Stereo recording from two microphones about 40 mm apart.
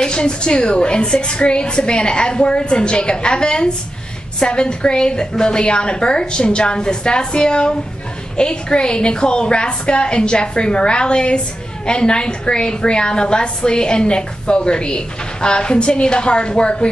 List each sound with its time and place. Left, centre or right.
0.0 s a woman's voice: left